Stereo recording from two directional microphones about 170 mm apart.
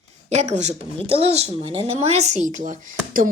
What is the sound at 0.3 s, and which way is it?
Speech, 40° right (ahead or behind).